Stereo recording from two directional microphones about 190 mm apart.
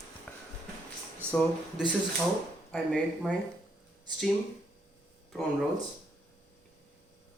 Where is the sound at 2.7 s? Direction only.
Centre (ahead or behind).